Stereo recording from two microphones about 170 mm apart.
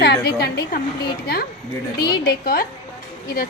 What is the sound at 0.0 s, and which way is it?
Speech, 75° left (ahead or behind).